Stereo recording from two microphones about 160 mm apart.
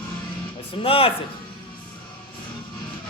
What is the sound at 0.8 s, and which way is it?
Speech, 35° left (ahead or behind).